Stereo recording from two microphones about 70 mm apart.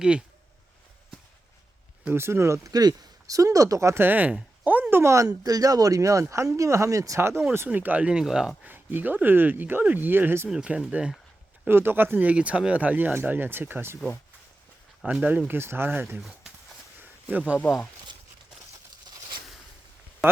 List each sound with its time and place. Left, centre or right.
2.1 s speech: right
2.6 s speech: right
4.0 s speech: right
7.2 s speech: right
7.7 s speech: right
8.2 s speech: centre
8.6 s speech: right
10.5 s speech: centre
11.7 s speech: right
15.1 s speech: centre
15.4 s speech: right
17.0 s a sound: right